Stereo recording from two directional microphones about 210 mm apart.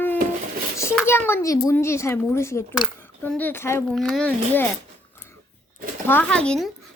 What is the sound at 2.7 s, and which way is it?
Speech, centre (ahead or behind).